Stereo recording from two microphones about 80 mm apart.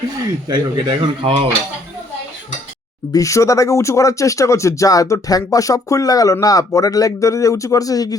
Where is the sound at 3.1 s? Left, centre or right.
Left.